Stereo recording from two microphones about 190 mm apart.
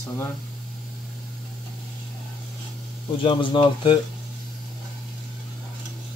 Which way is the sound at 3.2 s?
25° left (ahead or behind).